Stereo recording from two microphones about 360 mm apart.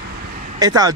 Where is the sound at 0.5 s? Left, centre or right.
Centre.